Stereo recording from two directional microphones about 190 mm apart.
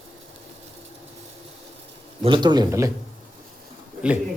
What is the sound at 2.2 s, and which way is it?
Speech, 25° right (ahead or behind).